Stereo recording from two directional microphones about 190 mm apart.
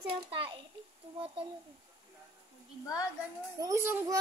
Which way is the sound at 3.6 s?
15° right (ahead or behind).